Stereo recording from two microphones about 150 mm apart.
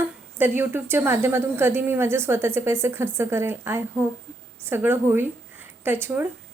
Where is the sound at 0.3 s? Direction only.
15° right (ahead or behind).